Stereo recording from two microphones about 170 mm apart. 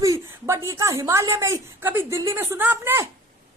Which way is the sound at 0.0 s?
20° right (ahead or behind).